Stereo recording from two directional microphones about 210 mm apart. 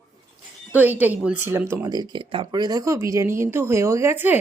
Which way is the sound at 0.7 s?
10° right (ahead or behind).